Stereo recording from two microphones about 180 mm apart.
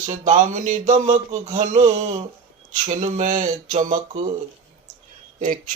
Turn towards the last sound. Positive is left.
turn(degrees=-50)  # may be behind; listen again after turning